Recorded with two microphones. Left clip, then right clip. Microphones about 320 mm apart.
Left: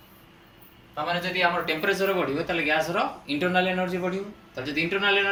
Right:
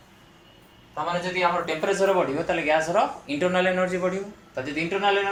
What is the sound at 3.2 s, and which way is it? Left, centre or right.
Speech, right.